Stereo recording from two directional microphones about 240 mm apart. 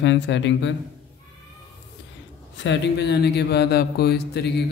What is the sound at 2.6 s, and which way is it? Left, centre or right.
Speech, left.